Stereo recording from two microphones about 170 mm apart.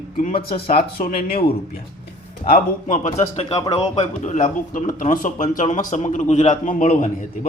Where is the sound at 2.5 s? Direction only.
50° left (ahead or behind).